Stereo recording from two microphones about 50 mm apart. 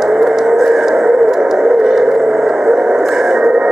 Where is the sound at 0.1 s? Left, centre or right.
Centre.